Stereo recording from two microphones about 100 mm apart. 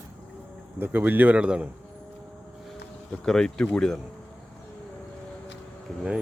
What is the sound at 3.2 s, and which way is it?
Speech, 5° left (ahead or behind).